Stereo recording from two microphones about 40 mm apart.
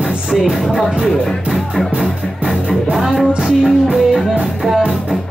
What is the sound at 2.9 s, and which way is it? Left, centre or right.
Music, centre.